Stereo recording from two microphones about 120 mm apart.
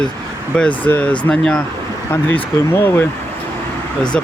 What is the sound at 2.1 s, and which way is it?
Speech, 15° left (ahead or behind).